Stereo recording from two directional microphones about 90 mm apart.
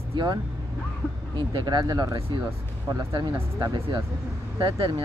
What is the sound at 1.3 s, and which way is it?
Speech, 55° right (ahead or behind).